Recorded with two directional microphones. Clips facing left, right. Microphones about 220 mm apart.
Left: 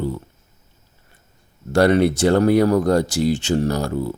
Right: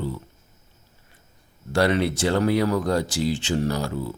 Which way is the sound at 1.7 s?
50° left (ahead or behind).